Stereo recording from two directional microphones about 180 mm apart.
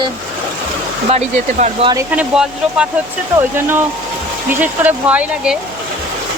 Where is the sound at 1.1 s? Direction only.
40° right (ahead or behind).